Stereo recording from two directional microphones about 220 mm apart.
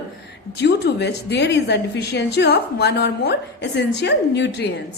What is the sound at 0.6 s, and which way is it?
A woman's voice, 50° left (ahead or behind).